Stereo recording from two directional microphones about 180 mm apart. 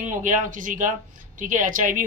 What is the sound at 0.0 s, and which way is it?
Speech, 45° right (ahead or behind).